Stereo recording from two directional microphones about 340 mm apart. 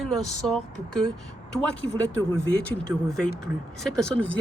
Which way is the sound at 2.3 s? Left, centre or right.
Centre.